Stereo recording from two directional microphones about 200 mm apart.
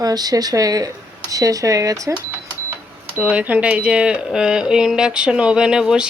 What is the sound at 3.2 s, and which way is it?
Speech, 5° right (ahead or behind).